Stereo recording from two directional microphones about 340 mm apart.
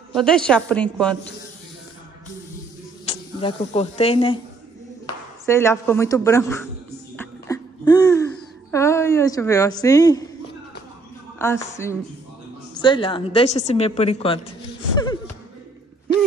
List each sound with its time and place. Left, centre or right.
0.1 s speech: centre
3.1 s speech: centre
5.4 s a woman's voice: centre
7.2 s music: centre
8.7 s a woman's voice: centre
11.3 s a woman's voice: centre